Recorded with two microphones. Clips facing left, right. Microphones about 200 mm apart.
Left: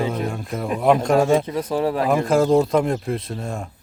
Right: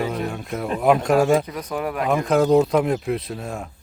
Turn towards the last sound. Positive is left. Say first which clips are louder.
# left 1 dB
turn(degrees=-5)  # may be behind; listen again after turning